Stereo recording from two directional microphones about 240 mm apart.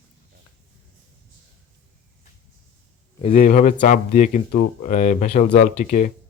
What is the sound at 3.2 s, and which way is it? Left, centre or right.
Speech, left.